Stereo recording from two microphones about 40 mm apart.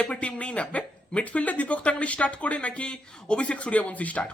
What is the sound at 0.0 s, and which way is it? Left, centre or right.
Speech, left.